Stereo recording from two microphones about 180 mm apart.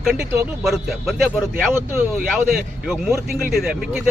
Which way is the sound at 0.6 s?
Centre (ahead or behind).